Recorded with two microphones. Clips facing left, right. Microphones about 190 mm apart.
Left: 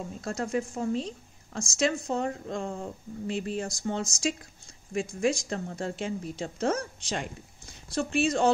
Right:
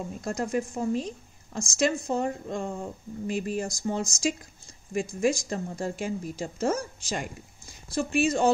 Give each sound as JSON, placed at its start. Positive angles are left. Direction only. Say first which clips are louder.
{"t": 0.0, "sound": "a woman's voice", "louder": "right 2 dB", "side_deg": -10}